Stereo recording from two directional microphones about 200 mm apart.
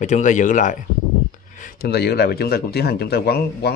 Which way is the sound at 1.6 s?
50° left (ahead or behind).